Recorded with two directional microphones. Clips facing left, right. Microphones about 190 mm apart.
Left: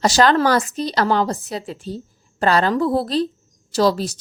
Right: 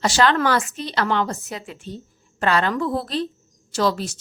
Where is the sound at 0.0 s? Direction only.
40° left (ahead or behind).